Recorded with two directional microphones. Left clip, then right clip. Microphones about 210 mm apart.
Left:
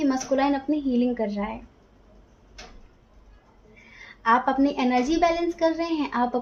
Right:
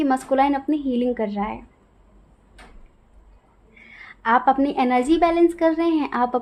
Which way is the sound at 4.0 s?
50° right (ahead or behind).